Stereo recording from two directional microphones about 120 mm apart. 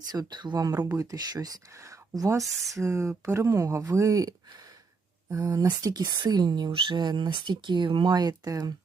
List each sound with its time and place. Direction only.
0.1 s speech: 35° right (ahead or behind)